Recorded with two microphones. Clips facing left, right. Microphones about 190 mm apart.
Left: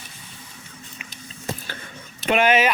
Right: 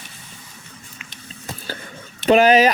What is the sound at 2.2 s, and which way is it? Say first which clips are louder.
Speech: right 5 dB; 35° right (ahead or behind).